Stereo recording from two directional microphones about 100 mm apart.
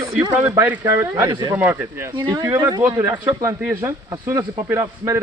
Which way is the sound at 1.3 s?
45° right (ahead or behind).